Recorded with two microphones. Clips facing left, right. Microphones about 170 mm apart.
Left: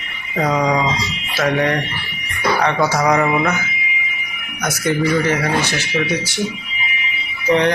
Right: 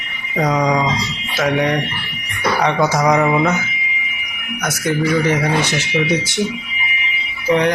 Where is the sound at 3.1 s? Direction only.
5° right (ahead or behind).